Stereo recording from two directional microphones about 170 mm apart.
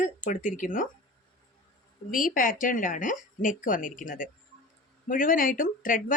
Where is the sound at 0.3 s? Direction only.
50° left (ahead or behind).